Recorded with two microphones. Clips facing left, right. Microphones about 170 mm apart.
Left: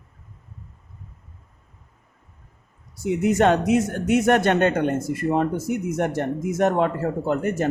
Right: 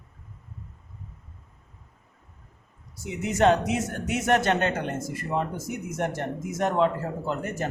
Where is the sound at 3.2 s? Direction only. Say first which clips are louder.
Left 2 dB; 55° left (ahead or behind).